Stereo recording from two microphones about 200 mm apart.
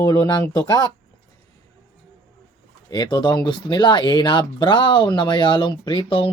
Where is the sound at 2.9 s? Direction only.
20° left (ahead or behind).